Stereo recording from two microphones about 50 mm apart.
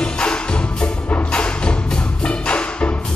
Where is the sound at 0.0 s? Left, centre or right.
Centre.